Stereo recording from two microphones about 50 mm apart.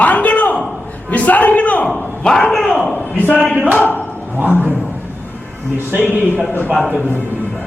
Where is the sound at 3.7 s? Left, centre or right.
Left.